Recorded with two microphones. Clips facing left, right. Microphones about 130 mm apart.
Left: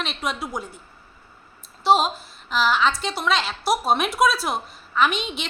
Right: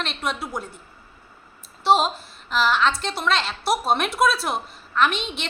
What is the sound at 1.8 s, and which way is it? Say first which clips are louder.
A woman's voice: even; centre (ahead or behind).